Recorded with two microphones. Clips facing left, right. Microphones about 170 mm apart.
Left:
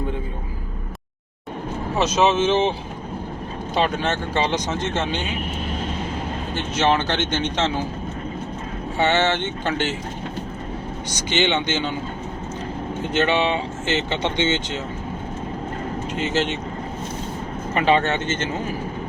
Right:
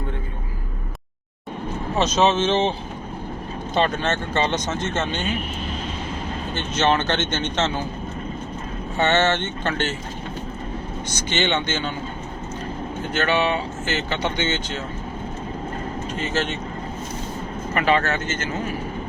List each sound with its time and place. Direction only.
2.0 s speech: 10° left (ahead or behind)
3.8 s speech: 10° left (ahead or behind)
6.5 s speech: 10° left (ahead or behind)
9.0 s speech: 15° left (ahead or behind)
11.1 s speech: 15° left (ahead or behind)
13.1 s speech: 20° left (ahead or behind)
16.1 s speech: 20° left (ahead or behind)
17.7 s speech: 25° left (ahead or behind)